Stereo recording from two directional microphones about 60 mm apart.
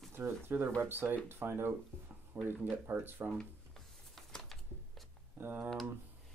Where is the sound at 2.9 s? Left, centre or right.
Right.